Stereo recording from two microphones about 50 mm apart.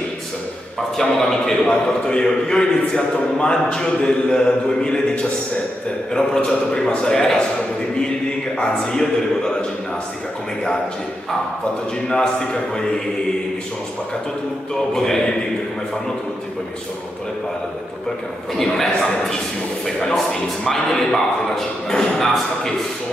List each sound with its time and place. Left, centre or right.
0.9 s a man's voice: centre
8.5 s a man's voice: centre
12.1 s a man's voice: centre
14.7 s a man's voice: centre
18.6 s a man's voice: centre
20.6 s a man's voice: centre